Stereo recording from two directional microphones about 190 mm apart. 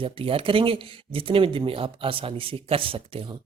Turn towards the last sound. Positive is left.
turn(degrees=-30)  # may be behind; listen again after turning